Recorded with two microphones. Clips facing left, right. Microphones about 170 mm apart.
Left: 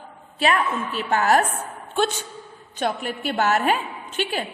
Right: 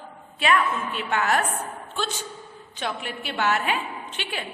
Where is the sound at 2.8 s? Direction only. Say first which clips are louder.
Left 6 dB; 45° left (ahead or behind).